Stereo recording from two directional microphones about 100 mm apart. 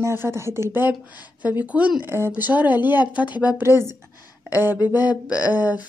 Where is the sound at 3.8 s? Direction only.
25° right (ahead or behind).